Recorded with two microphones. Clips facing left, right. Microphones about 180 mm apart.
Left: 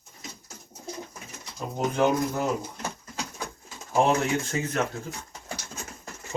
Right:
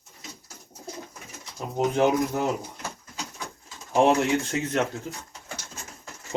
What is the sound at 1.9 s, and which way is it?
Speech, 15° right (ahead or behind).